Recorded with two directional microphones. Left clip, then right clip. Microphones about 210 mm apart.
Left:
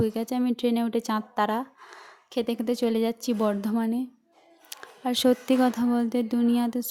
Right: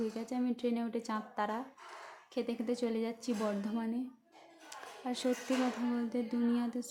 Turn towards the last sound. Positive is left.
turn(degrees=45)  # may be behind; listen again after turning